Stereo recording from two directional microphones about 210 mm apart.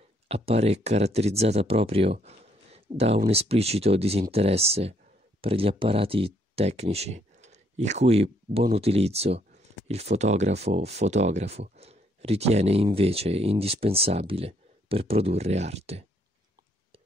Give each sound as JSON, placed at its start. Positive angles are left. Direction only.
{"t": 0.3, "sound": "speech", "side_deg": -30}
{"t": 2.2, "sound": "a sound", "side_deg": -30}
{"t": 3.3, "sound": "speech", "side_deg": -30}